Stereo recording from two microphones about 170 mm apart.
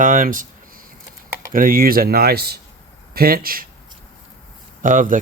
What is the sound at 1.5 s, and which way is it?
Speech, 55° right (ahead or behind).